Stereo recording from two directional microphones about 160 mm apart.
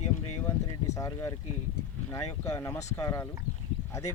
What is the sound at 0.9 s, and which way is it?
Speech, 20° left (ahead or behind).